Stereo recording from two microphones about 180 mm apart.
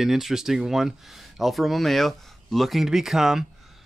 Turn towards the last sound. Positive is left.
turn(degrees=0)  # may be behind; listen again after turning